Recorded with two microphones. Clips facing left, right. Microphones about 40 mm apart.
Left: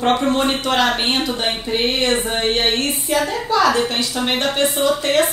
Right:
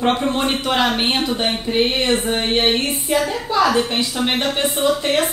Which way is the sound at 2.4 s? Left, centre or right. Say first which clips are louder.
Even; centre.